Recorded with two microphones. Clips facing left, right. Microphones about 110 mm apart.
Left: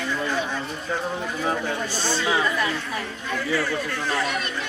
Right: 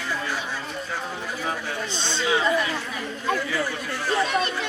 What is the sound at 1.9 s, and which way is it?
Speech, 20° right (ahead or behind).